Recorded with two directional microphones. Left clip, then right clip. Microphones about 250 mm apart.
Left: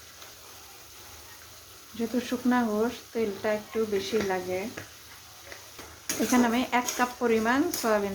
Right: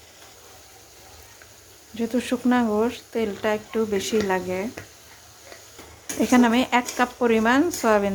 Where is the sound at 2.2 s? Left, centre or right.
Centre.